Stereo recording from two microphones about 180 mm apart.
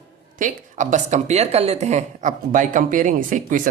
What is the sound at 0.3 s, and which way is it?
Speech, 45° right (ahead or behind).